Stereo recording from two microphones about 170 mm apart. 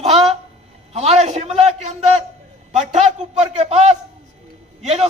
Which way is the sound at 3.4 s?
40° right (ahead or behind).